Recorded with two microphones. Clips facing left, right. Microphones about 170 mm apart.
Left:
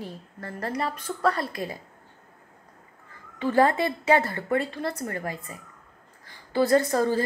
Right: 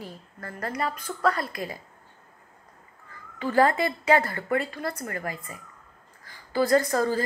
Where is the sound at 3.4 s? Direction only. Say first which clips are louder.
Left 1 dB; 25° left (ahead or behind).